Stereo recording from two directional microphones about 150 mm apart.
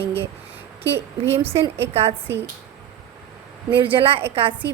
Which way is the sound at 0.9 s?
15° right (ahead or behind).